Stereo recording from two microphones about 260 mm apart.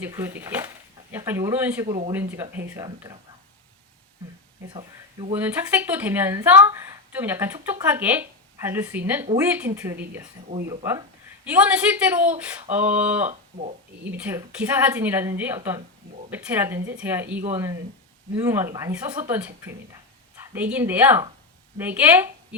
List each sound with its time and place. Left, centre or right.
0.0 s a woman's voice: centre
4.7 s speech: centre
5.3 s a woman's voice: centre
13.2 s speech: right
14.1 s a woman's voice: centre